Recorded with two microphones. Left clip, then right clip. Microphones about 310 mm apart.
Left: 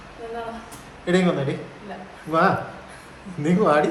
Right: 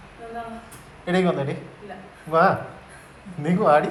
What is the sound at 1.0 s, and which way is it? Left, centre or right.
Speech, centre.